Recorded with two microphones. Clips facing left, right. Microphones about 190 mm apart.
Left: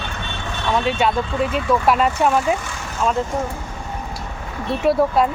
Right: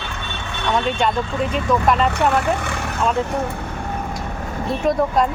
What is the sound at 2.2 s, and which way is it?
Speech, 65° right (ahead or behind).